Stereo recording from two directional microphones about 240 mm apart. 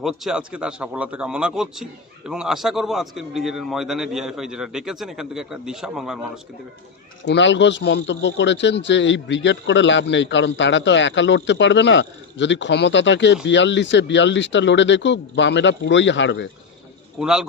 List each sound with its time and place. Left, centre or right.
0.0 s a man's voice: centre
7.3 s a man's voice: left
17.2 s a man's voice: centre